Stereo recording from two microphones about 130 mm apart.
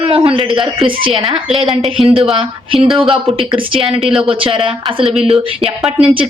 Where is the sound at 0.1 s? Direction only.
45° right (ahead or behind).